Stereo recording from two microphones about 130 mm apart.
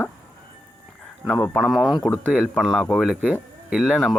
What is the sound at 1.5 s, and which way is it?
Speech, centre (ahead or behind).